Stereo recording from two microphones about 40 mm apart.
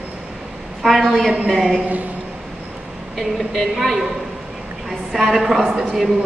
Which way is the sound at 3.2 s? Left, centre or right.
Centre.